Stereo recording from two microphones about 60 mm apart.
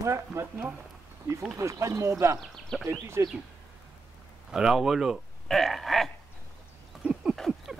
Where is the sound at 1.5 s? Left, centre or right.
Right.